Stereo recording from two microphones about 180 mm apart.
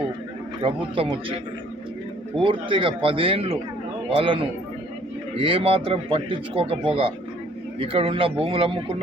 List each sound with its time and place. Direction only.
0.6 s speech: 30° right (ahead or behind)
2.4 s a man's voice: 30° right (ahead or behind)